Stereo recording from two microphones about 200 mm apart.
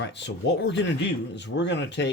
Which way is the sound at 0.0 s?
60° left (ahead or behind).